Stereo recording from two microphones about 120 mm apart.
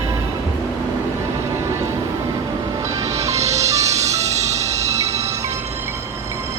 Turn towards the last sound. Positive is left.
turn(degrees=-70)  # may be behind; listen again after turning